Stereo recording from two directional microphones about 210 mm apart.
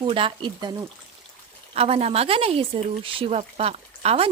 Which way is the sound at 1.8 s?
30° right (ahead or behind).